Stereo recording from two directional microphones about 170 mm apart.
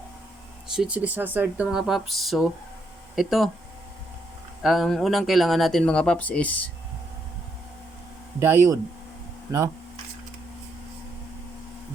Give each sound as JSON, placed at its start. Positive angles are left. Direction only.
{"t": 0.7, "sound": "speech", "side_deg": -5}
{"t": 4.6, "sound": "speech", "side_deg": 0}
{"t": 8.4, "sound": "speech", "side_deg": -15}